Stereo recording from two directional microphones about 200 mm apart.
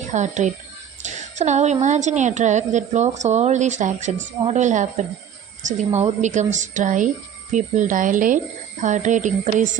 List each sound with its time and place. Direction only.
0.1 s a woman's voice: 35° right (ahead or behind)
6.2 s a woman's voice: 35° right (ahead or behind)